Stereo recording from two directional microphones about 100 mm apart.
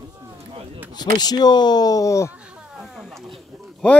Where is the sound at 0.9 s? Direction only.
45° left (ahead or behind).